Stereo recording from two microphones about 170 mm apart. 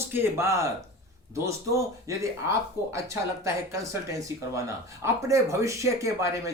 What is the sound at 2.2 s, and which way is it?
A man's voice, 15° right (ahead or behind).